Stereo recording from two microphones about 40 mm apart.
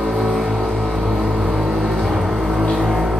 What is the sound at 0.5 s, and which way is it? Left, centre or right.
Music, centre.